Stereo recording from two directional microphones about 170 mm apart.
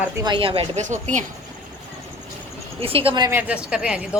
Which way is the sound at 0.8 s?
45° right (ahead or behind).